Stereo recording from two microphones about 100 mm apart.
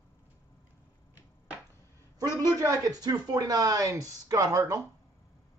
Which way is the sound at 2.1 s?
40° right (ahead or behind).